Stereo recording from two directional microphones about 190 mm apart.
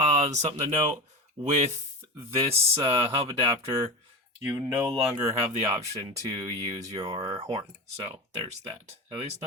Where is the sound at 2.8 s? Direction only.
25° right (ahead or behind).